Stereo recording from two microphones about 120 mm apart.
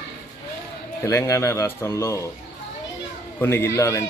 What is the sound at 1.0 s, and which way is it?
A man's voice, 25° left (ahead or behind).